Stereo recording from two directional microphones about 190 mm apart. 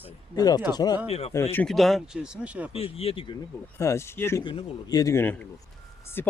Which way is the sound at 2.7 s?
30° left (ahead or behind).